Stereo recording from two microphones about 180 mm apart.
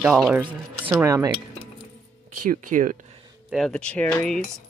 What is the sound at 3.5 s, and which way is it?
Speech, 5° left (ahead or behind).